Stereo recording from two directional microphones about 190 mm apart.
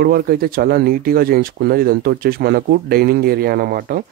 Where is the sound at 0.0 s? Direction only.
50° right (ahead or behind).